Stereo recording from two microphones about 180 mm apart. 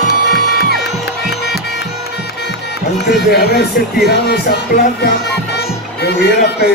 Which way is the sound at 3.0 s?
65° left (ahead or behind).